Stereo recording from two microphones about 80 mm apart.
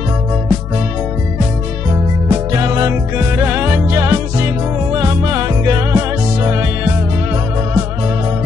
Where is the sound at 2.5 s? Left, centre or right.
Right.